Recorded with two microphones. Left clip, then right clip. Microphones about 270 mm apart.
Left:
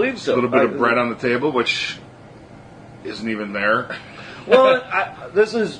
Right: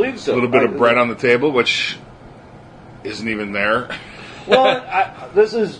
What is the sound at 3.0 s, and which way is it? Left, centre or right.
Speech, right.